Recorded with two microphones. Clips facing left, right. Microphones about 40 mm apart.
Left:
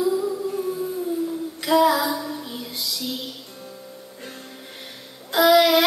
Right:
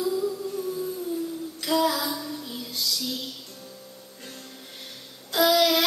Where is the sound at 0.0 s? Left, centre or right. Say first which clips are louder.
Left 4 dB; left.